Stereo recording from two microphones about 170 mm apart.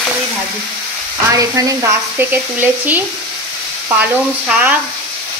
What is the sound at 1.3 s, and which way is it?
Speech, 20° right (ahead or behind).